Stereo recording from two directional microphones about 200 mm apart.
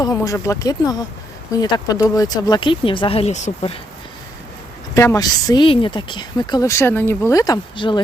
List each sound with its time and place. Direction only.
0.0 s speech: 15° left (ahead or behind); by 3.8 s 35° left (ahead or behind)
4.9 s speech: 15° left (ahead or behind)